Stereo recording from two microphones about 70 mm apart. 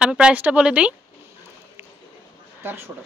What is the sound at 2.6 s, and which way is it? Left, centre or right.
Speech, right.